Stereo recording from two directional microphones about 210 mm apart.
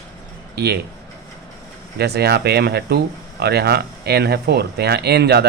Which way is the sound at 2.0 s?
50° right (ahead or behind).